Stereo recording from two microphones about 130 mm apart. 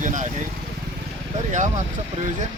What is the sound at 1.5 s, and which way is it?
Speech, 70° right (ahead or behind).